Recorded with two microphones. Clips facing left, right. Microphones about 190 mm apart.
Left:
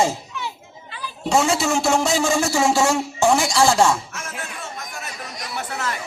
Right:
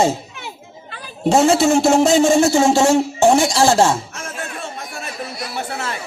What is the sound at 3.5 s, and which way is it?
Speech, 25° right (ahead or behind).